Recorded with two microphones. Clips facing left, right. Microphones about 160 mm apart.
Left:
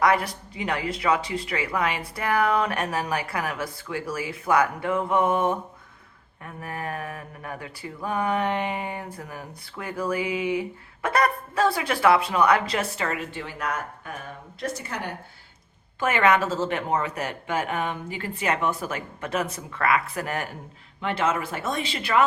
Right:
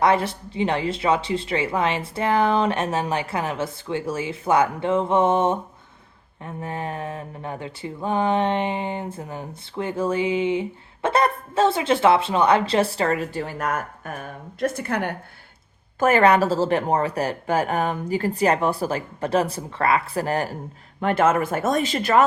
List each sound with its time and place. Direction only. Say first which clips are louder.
0.0 s a sound: right 3 dB; 25° right (ahead or behind); by 15.1 s 60° right (ahead or behind)
16.0 s a woman's voice: right 5 dB; 40° right (ahead or behind)
21.0 s speech: right 6 dB; 50° right (ahead or behind)